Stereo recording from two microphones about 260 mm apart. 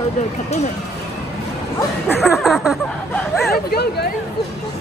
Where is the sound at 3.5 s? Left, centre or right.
Left.